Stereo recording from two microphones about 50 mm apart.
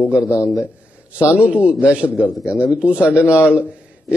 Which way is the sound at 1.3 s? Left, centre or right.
Right.